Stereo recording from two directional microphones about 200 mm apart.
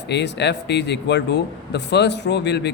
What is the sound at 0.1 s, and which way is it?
Speech, 60° left (ahead or behind).